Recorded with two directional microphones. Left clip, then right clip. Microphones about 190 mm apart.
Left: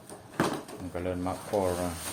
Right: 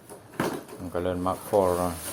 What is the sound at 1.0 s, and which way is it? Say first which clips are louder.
Speech: right 6 dB; 30° right (ahead or behind).